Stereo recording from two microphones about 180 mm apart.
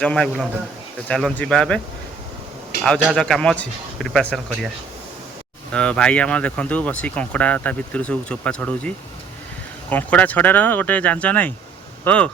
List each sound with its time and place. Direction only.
0.0 s a man's voice: 5° left (ahead or behind)
2.8 s a man's voice: 5° left (ahead or behind)
5.7 s speech: 5° left (ahead or behind)
9.9 s speech: 10° left (ahead or behind)